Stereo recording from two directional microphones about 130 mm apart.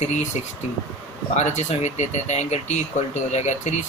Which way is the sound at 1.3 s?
60° left (ahead or behind).